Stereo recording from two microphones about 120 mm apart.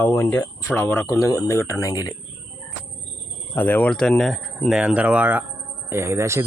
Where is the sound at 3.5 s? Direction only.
15° left (ahead or behind); by 5.4 s 10° right (ahead or behind).